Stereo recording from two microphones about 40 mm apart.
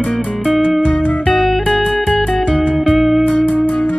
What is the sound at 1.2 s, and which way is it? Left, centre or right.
Music, centre.